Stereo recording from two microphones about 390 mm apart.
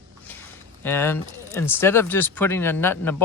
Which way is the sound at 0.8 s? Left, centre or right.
Centre.